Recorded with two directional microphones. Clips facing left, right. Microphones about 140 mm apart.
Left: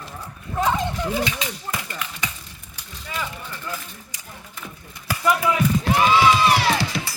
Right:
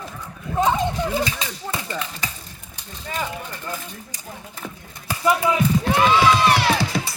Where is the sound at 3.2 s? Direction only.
20° right (ahead or behind).